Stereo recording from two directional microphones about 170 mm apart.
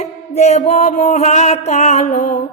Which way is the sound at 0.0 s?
40° left (ahead or behind).